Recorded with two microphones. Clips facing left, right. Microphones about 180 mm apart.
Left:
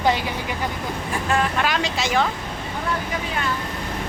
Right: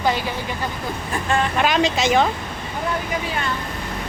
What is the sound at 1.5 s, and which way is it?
Speech, 20° right (ahead or behind).